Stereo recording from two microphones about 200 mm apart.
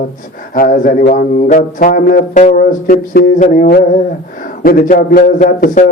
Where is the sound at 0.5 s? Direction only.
45° left (ahead or behind).